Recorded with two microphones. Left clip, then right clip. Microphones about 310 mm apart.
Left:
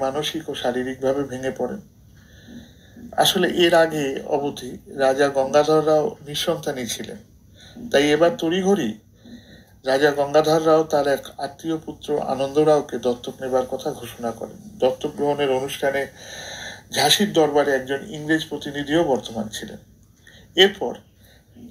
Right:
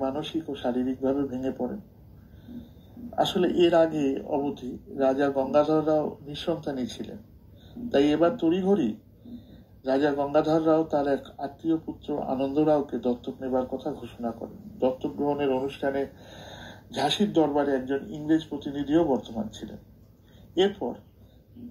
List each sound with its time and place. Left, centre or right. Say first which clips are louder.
0.0 s speech: left 6 dB; left
3.2 s speech: left 5 dB; left